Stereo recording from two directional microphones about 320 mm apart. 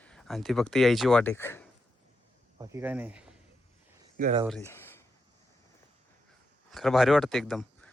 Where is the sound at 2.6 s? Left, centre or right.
Centre.